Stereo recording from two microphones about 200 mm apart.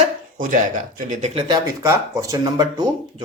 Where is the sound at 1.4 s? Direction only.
20° right (ahead or behind).